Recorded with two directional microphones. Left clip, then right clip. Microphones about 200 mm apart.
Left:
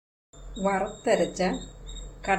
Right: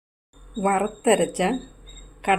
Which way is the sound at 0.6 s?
50° right (ahead or behind).